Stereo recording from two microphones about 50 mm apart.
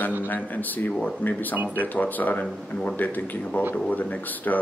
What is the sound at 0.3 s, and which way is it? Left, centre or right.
A man's voice, left.